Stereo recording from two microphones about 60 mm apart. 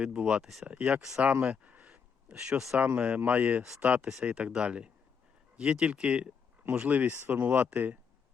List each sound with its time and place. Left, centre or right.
0.0 s speech: centre
1.7 s a sound: right
2.7 s speech: centre